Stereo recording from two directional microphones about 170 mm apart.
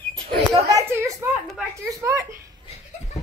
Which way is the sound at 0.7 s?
15° right (ahead or behind).